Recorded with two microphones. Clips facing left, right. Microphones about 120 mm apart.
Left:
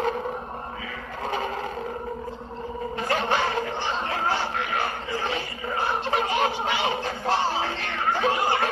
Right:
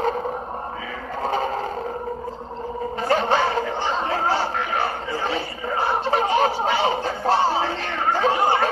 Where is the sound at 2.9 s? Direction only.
35° right (ahead or behind).